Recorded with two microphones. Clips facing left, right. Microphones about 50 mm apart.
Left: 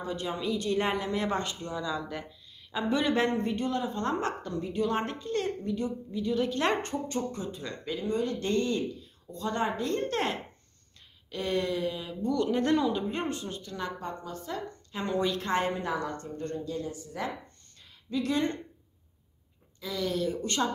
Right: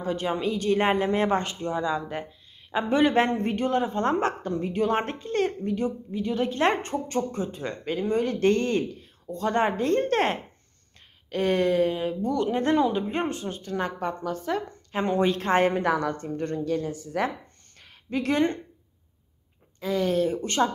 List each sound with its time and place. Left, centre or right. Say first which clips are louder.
0.0 s a woman's voice: right 6 dB; right
7.1 s a woman's voice: right 5 dB; right
12.4 s a woman's voice: right 3 dB; right
14.5 s speech: right 8 dB; right
14.9 s a woman's voice: right 6 dB; right
15.6 s speech: right 8 dB; right
17.7 s a sound: right 3 dB; right
19.8 s a woman's voice: right 7 dB; right